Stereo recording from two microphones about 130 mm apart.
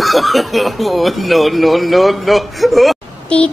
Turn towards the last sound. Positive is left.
turn(degrees=10)  # may be behind; listen again after turning